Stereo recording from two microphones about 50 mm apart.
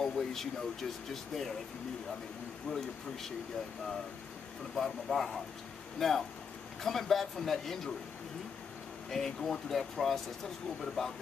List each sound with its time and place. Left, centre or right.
0.0 s speech: centre
2.7 s speech: left
4.7 s speech: centre
9.1 s speech: centre